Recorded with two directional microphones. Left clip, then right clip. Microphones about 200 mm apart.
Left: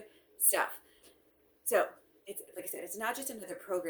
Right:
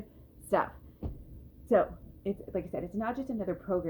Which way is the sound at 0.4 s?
25° left (ahead or behind).